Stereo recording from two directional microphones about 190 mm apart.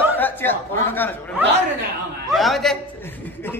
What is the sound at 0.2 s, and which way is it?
Speech, 10° left (ahead or behind).